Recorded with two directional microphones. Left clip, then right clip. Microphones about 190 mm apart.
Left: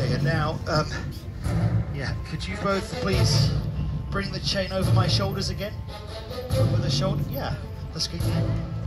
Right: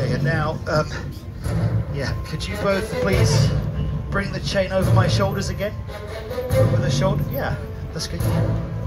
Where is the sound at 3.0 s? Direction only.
20° right (ahead or behind).